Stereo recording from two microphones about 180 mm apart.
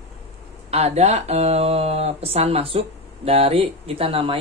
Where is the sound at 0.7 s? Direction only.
35° right (ahead or behind).